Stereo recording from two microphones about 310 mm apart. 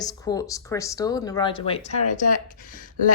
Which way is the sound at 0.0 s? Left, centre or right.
Centre.